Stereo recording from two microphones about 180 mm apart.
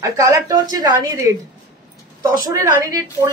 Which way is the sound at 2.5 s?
15° right (ahead or behind).